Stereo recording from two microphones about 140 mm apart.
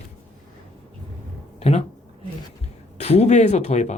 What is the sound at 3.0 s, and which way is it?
Speech, 55° left (ahead or behind).